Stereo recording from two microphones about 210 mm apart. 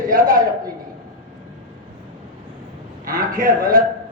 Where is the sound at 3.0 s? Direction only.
40° right (ahead or behind).